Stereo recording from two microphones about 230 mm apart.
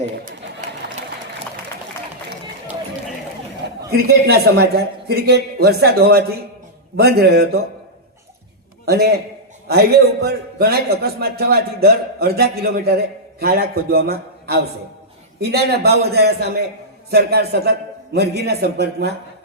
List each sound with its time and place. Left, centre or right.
3.8 s a man's voice: right
8.9 s a man's voice: right
10.2 s a man's voice: right